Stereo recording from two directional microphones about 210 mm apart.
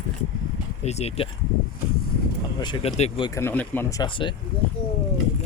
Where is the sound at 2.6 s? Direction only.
25° left (ahead or behind).